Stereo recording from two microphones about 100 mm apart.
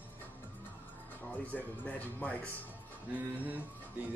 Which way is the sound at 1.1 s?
15° left (ahead or behind).